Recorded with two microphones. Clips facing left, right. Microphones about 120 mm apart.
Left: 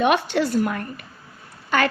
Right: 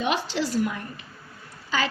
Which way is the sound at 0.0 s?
60° left (ahead or behind).